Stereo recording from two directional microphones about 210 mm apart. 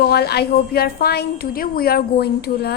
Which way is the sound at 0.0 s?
50° left (ahead or behind).